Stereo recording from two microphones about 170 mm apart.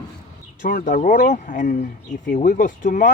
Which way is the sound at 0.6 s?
55° left (ahead or behind).